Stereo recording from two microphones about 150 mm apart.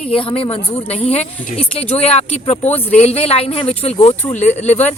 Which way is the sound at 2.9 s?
45° left (ahead or behind).